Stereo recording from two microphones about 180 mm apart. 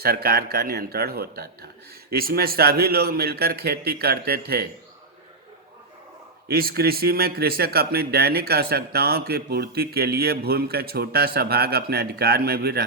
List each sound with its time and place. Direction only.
0.0 s a man's voice: 60° right (ahead or behind)
6.5 s a man's voice: 60° right (ahead or behind)